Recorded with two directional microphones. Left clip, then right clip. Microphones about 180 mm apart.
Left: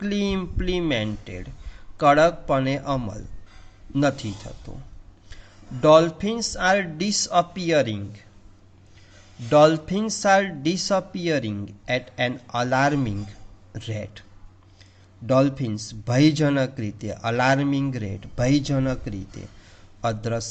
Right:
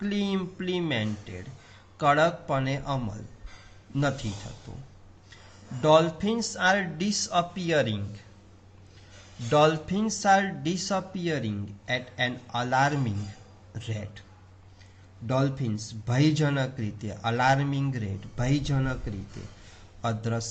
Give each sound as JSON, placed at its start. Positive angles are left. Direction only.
{"t": 0.0, "sound": "speech", "side_deg": 40}
{"t": 5.8, "sound": "speech", "side_deg": 40}
{"t": 9.5, "sound": "speech", "side_deg": 35}
{"t": 15.3, "sound": "speech", "side_deg": 40}
{"t": 20.0, "sound": "speech", "side_deg": 40}